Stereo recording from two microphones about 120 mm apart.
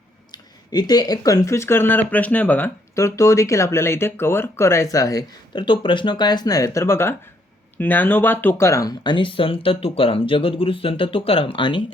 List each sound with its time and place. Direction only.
0.3 s speech: 35° left (ahead or behind); by 2.7 s 15° left (ahead or behind)
2.9 s speech: 25° left (ahead or behind); by 11.8 s 45° left (ahead or behind)